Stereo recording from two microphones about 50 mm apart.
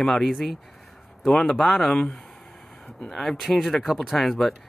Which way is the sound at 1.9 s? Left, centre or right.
Centre.